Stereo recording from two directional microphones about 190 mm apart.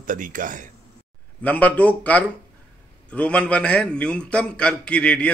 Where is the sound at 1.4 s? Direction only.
10° left (ahead or behind).